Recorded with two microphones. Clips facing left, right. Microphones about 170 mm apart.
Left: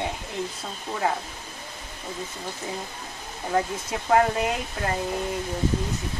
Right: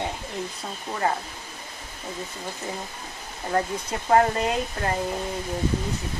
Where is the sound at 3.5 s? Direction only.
Centre (ahead or behind).